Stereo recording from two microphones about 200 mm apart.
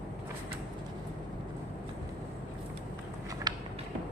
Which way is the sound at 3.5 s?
20° right (ahead or behind).